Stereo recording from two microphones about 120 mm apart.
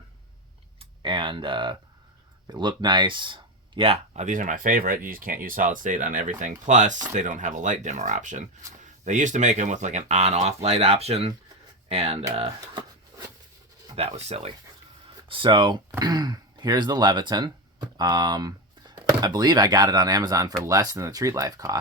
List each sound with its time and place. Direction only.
0.8 s speech: 45° right (ahead or behind); by 4.7 s 90° right
5.7 s speech: 90° right; by 12.2 s 55° right (ahead or behind)
12.5 s a sound: 35° right (ahead or behind)
13.9 s speech: 60° right (ahead or behind)
15.3 s speech: 45° right (ahead or behind)